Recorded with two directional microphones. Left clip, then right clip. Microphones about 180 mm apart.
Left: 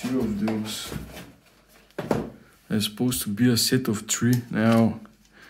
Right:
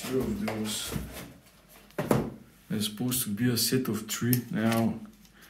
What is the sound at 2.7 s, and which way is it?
Speech, 40° left (ahead or behind).